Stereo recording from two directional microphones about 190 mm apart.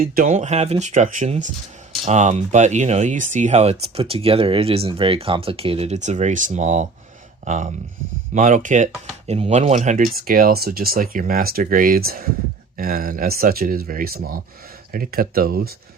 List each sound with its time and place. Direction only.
0.0 s speech: 50° right (ahead or behind)